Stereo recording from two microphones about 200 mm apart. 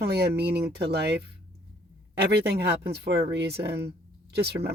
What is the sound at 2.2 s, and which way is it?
Speech, 55° right (ahead or behind).